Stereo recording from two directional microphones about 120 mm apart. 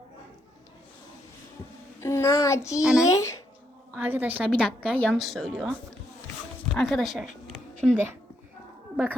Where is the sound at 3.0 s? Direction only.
25° left (ahead or behind).